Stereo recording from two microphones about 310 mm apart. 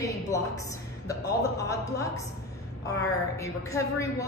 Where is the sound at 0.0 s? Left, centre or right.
Centre.